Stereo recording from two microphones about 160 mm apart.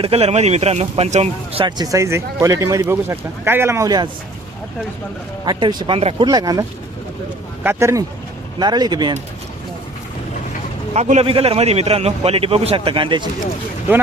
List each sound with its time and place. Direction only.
0.0 s a man's voice: 40° right (ahead or behind)
1.8 s speech: 20° right (ahead or behind)
5.5 s speech: 30° right (ahead or behind)
10.9 s a man's voice: 45° right (ahead or behind)